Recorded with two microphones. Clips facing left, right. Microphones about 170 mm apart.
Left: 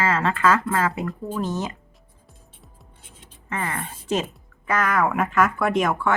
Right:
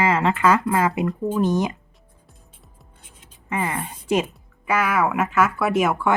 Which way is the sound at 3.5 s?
10° right (ahead or behind).